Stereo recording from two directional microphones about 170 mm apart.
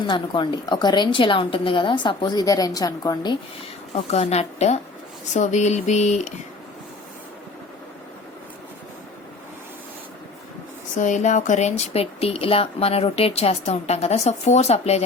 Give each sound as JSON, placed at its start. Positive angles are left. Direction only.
{"t": 0.1, "sound": "a woman's voice", "side_deg": 25}
{"t": 3.9, "sound": "speech", "side_deg": 40}
{"t": 5.3, "sound": "a sound", "side_deg": 45}
{"t": 10.9, "sound": "speech", "side_deg": 45}